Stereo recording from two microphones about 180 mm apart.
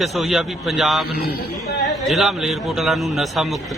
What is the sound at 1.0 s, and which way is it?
Speech, 60° left (ahead or behind).